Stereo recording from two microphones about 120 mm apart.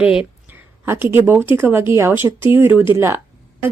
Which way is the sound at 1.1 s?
20° right (ahead or behind).